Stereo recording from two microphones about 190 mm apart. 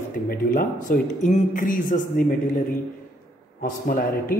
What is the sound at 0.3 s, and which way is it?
A man's voice, 45° left (ahead or behind).